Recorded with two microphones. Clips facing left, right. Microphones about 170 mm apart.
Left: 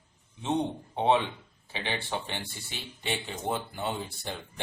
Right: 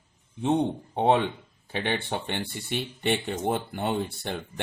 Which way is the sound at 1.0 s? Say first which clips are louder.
Right 3 dB; 50° right (ahead or behind).